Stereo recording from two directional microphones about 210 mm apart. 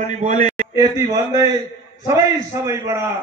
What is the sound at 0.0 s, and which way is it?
Speech, 35° right (ahead or behind).